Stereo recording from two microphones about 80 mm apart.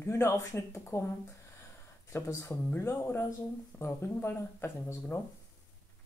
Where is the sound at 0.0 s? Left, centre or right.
Left.